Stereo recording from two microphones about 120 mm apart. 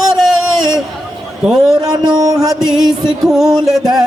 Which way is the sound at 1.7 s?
35° right (ahead or behind).